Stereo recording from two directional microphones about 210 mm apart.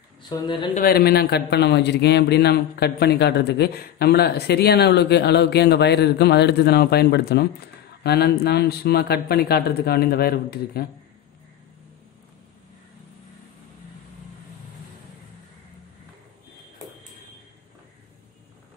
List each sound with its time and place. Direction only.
0.3 s speech: 20° left (ahead or behind)
0.7 s a man's voice: 45° left (ahead or behind)